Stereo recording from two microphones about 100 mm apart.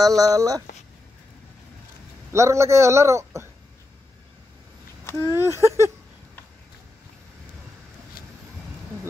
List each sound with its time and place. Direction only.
0.0 s speech: 35° right (ahead or behind)
2.3 s a man's voice: 30° right (ahead or behind)
5.3 s a man's voice: 25° right (ahead or behind)